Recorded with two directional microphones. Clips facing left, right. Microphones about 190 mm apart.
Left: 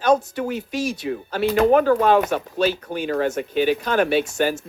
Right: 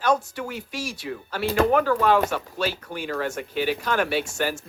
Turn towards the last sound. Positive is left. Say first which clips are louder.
# left 5 dB
turn(degrees=20)  # may be behind; listen again after turning